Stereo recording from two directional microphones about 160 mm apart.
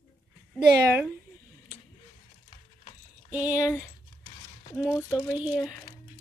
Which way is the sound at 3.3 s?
10° right (ahead or behind).